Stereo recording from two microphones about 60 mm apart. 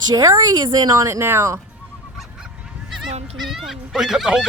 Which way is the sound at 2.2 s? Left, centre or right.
Centre.